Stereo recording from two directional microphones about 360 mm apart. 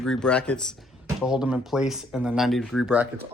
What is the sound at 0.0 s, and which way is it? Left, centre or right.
Speech, centre.